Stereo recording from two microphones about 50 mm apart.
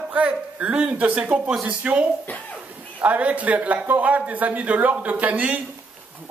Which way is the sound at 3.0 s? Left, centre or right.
Right.